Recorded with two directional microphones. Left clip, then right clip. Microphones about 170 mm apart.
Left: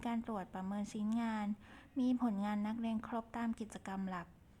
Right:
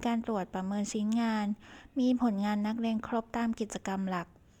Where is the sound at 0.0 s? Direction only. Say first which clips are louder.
Right 9 dB; 35° right (ahead or behind).